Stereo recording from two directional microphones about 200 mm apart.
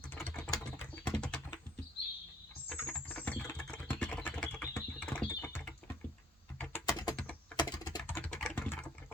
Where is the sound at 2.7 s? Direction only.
10° left (ahead or behind).